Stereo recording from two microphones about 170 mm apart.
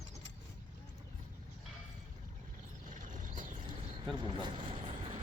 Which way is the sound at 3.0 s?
50° right (ahead or behind).